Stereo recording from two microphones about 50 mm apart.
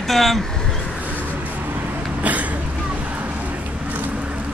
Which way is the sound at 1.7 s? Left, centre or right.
Right.